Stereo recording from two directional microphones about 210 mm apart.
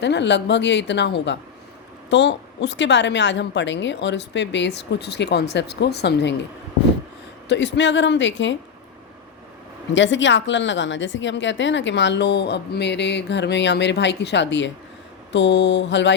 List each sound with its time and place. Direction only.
0.0 s a woman's voice: 55° left (ahead or behind)
7.4 s a woman's voice: 55° left (ahead or behind)
9.9 s a woman's voice: 60° left (ahead or behind)